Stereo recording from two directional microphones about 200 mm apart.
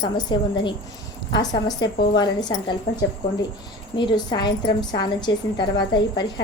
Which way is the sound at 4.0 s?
20° left (ahead or behind).